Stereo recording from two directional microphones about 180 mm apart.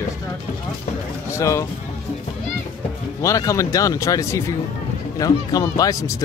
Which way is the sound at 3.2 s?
20° left (ahead or behind).